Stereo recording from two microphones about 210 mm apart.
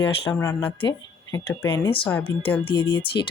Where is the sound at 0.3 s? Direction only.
10° left (ahead or behind).